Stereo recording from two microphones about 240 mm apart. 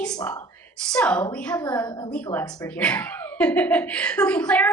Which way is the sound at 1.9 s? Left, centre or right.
Centre.